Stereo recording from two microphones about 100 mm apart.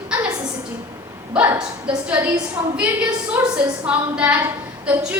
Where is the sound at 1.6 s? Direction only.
10° right (ahead or behind).